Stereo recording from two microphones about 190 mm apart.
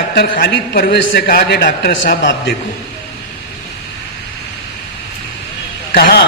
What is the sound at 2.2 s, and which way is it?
Speech, 70° left (ahead or behind).